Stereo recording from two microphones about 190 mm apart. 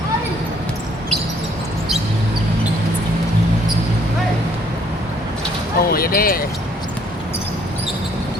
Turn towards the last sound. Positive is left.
turn(degrees=50)  # may be behind; listen again after turning